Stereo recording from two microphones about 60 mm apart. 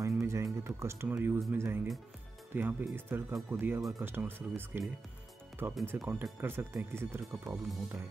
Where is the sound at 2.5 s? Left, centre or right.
Right.